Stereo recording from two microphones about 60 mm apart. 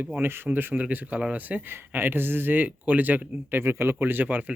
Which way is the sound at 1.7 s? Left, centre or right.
Right.